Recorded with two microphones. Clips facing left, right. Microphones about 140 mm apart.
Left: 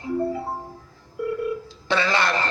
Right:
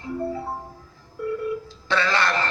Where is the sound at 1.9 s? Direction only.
15° left (ahead or behind).